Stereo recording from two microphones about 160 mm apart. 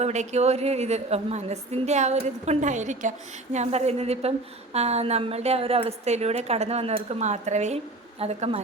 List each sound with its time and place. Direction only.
0.0 s a woman's voice: 45° right (ahead or behind)